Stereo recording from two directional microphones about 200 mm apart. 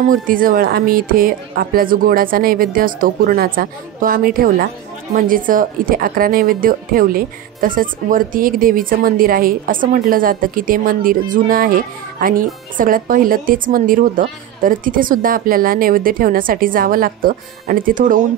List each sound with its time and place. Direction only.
0.1 s a woman's voice: 45° right (ahead or behind)